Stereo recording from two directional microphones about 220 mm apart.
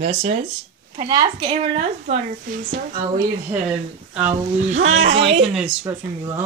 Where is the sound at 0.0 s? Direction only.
30° right (ahead or behind).